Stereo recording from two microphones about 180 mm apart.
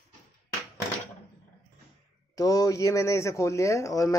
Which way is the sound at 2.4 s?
20° left (ahead or behind).